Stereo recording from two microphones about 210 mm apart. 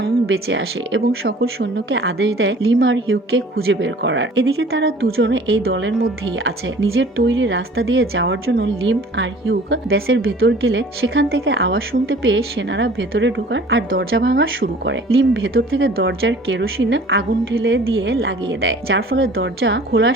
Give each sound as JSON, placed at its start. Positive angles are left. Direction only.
{"t": 0.0, "sound": "a woman's voice", "side_deg": -65}
{"t": 16.0, "sound": "a woman's voice", "side_deg": -60}